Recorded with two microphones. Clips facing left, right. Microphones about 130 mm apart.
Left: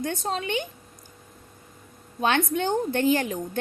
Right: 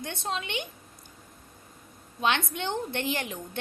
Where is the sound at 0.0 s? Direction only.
40° left (ahead or behind).